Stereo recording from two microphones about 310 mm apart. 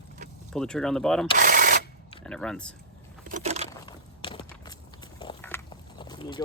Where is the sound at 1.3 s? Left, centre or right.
Right.